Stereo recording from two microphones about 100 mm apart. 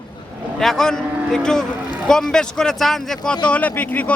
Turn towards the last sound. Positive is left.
turn(degrees=15)  # may be behind; listen again after turning